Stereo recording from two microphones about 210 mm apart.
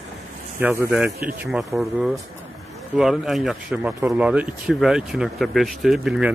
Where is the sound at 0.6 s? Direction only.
10° right (ahead or behind).